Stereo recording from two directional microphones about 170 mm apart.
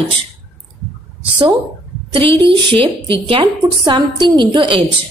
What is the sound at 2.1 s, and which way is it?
A woman's voice, 30° right (ahead or behind).